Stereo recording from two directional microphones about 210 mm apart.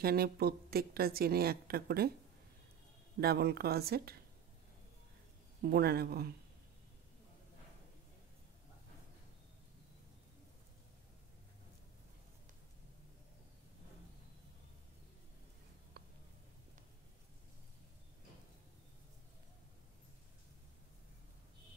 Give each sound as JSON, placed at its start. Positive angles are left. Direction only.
{"t": 0.0, "sound": "a woman's voice", "side_deg": -45}
{"t": 3.2, "sound": "a woman's voice", "side_deg": -50}
{"t": 5.6, "sound": "a woman's voice", "side_deg": -50}
{"t": 16.0, "sound": "a sound", "side_deg": -50}